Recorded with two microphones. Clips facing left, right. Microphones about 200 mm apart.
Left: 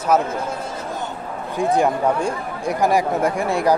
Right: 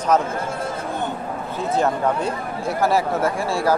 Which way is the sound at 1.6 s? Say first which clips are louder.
Left 3 dB; 15° left (ahead or behind).